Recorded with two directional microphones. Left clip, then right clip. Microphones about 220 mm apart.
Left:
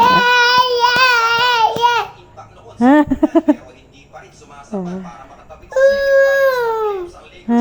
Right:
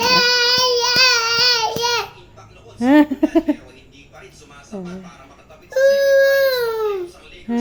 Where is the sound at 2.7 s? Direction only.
10° left (ahead or behind).